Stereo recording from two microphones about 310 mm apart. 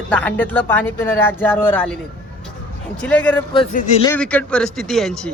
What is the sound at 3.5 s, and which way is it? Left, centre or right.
Speech, left.